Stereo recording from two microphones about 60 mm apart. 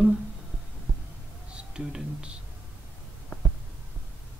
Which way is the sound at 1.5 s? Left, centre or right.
Centre.